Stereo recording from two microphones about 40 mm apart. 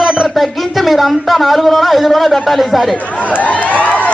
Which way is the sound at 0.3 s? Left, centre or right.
Centre.